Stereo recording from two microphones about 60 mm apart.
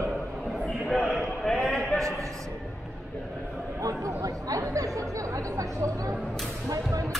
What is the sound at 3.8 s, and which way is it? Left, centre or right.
Chatter, right.